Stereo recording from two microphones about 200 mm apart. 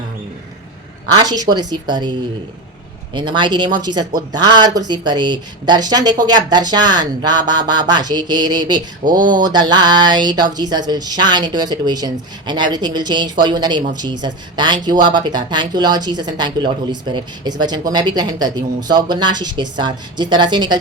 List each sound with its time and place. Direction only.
1.1 s a woman's voice: 20° right (ahead or behind)